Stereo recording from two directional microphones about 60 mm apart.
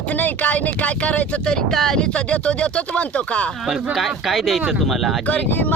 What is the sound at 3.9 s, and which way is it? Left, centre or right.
Speech, centre.